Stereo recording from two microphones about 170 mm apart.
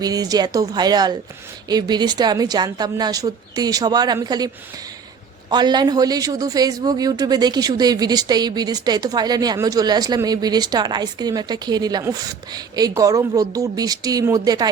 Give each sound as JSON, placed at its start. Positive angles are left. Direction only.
{"t": 0.0, "sound": "speech", "side_deg": -20}